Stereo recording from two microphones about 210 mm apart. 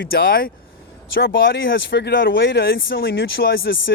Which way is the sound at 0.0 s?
45° left (ahead or behind).